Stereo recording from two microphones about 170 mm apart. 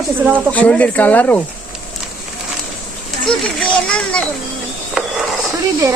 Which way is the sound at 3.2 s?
5° left (ahead or behind).